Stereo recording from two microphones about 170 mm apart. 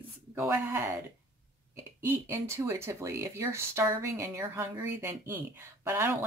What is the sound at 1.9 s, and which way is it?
Speech, 15° right (ahead or behind).